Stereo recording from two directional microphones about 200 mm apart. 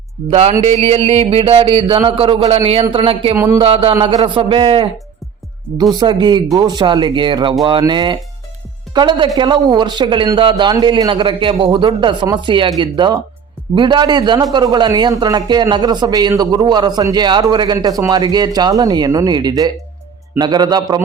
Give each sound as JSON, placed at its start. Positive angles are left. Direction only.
{"t": 0.3, "sound": "speech", "side_deg": -30}
{"t": 3.3, "sound": "speech", "side_deg": -15}
{"t": 3.6, "sound": "speech", "side_deg": -30}
{"t": 5.9, "sound": "speech", "side_deg": -20}